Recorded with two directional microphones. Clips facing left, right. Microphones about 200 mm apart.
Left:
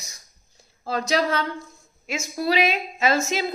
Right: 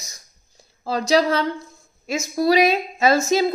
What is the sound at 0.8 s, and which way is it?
A woman's voice, 35° right (ahead or behind).